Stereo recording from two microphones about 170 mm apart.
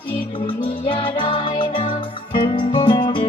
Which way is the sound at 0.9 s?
30° left (ahead or behind).